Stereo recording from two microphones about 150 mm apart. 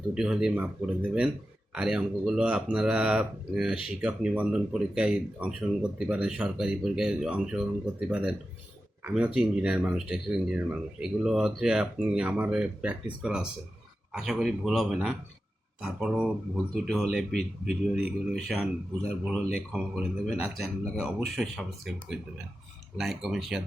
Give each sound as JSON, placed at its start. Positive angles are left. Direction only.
{"t": 0.1, "sound": "speech", "side_deg": -5}